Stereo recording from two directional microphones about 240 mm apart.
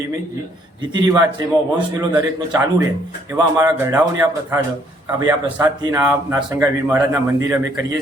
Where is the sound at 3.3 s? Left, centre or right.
Centre.